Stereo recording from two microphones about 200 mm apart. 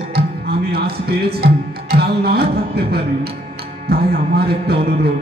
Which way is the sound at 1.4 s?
50° right (ahead or behind).